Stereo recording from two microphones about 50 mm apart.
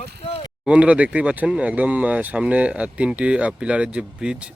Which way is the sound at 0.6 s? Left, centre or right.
Right.